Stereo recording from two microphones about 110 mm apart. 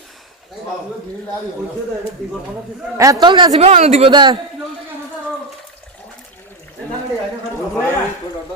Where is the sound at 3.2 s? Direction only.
45° right (ahead or behind).